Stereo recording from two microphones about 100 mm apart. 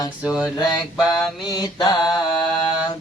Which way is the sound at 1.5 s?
40° left (ahead or behind).